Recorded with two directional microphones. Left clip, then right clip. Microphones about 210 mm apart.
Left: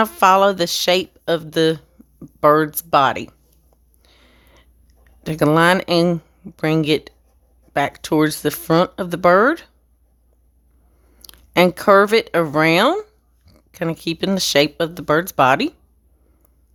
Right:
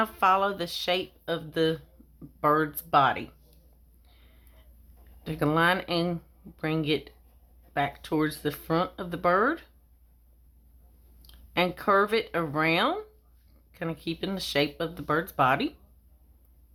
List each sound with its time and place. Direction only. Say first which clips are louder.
0.0 s speech: left 10 dB; 55° left (ahead or behind)
4.0 s a sound: left 11 dB; 55° left (ahead or behind)
5.2 s speech: left 10 dB; 55° left (ahead or behind)
11.2 s speech: left 12 dB; 55° left (ahead or behind)